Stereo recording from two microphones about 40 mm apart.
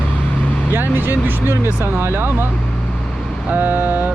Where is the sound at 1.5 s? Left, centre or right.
Right.